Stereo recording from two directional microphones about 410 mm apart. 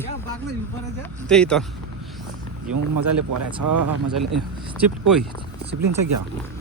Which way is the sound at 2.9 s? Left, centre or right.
Right.